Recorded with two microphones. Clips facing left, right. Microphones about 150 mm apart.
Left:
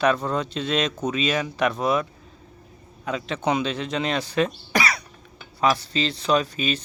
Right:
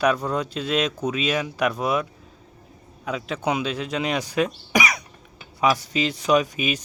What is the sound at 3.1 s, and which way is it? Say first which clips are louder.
Speech: left 1 dB; 5° right (ahead or behind).